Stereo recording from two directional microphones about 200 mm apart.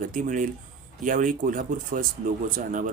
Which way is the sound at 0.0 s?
40° right (ahead or behind).